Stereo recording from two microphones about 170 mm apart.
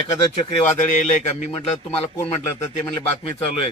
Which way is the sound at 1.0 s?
40° left (ahead or behind).